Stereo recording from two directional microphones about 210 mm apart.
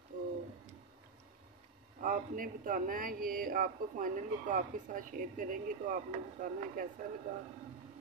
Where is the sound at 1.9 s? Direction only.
40° right (ahead or behind).